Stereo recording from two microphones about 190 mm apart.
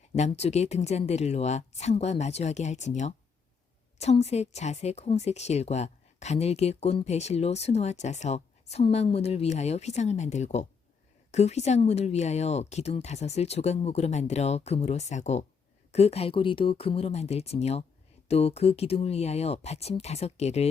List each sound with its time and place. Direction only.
0.2 s speech: 35° left (ahead or behind)